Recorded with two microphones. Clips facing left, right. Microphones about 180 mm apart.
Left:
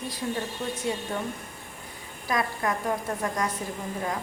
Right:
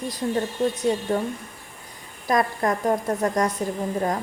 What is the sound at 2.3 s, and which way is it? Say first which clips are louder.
A woman's voice: right 6 dB; 45° right (ahead or behind).